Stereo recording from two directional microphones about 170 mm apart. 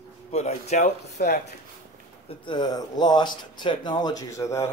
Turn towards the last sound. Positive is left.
turn(degrees=20)  # may be behind; listen again after turning